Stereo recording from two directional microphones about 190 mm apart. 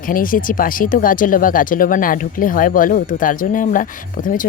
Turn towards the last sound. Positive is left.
turn(degrees=45)  # may be behind; listen again after turning